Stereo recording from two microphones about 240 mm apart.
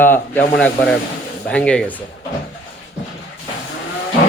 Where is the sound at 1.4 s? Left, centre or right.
Centre.